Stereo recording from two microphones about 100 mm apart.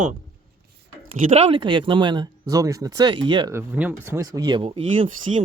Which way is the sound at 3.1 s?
55° right (ahead or behind).